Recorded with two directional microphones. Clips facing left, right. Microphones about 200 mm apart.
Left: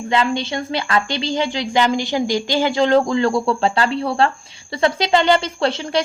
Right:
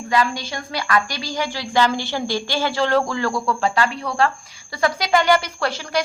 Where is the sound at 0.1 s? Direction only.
25° left (ahead or behind).